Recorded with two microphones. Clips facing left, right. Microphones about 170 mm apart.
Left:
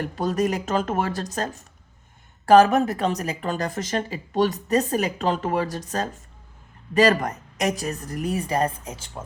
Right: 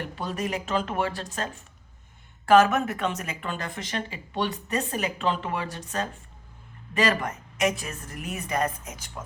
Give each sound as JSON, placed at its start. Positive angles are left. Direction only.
{"t": 0.0, "sound": "a woman's voice", "side_deg": 40}